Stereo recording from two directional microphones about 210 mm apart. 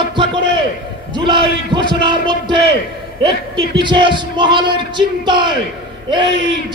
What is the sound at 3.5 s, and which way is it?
A man's voice, 20° right (ahead or behind).